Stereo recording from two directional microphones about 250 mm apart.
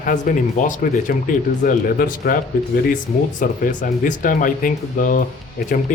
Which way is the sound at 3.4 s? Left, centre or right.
Left.